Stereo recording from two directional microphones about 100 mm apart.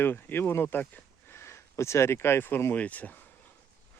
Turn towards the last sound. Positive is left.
turn(degrees=15)  # may be behind; listen again after turning